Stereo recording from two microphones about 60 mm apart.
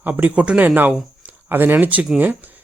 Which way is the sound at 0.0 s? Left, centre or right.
Right.